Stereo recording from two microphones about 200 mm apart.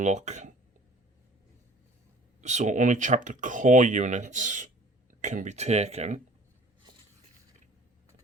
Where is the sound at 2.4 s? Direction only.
35° right (ahead or behind).